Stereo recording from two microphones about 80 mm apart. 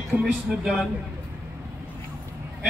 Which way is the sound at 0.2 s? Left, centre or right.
Centre.